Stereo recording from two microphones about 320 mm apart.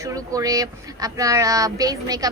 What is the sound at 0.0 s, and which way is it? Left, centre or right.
Speech, centre.